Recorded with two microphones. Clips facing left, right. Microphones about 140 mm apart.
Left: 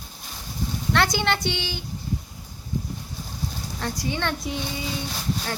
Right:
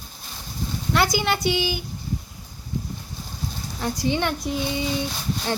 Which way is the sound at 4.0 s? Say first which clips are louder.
Right 7 dB; 25° right (ahead or behind).